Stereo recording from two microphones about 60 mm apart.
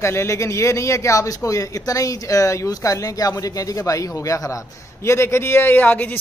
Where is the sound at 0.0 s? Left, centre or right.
Left.